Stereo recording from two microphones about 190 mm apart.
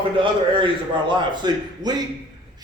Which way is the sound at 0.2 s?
25° right (ahead or behind).